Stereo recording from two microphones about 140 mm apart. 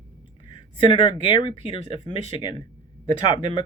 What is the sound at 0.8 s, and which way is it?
Speech, 35° left (ahead or behind).